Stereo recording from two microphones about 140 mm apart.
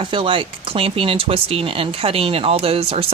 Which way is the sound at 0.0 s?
40° right (ahead or behind).